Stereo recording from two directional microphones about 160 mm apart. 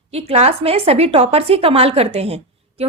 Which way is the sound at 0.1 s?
40° right (ahead or behind).